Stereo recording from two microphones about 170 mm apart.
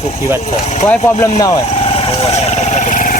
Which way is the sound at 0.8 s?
20° left (ahead or behind).